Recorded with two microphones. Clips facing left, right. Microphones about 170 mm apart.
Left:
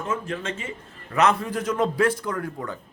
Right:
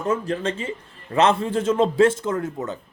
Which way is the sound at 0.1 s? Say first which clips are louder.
Right 6 dB; 35° right (ahead or behind).